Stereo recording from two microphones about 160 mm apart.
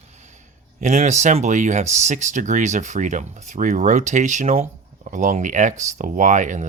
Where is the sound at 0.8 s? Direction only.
45° right (ahead or behind).